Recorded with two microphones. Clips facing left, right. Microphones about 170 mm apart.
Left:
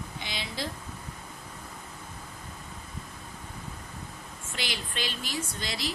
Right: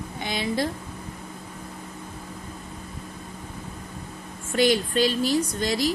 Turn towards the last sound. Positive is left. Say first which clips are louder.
# right 10 dB
turn(degrees=-45)  # may be behind; listen again after turning